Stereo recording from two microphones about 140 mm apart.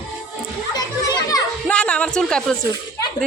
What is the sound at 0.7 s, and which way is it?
Children playing, 30° left (ahead or behind).